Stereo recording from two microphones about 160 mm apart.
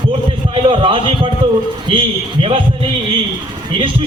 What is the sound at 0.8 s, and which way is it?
Speech, 35° right (ahead or behind).